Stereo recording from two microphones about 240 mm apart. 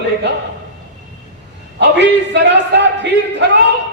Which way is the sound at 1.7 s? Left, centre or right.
Right.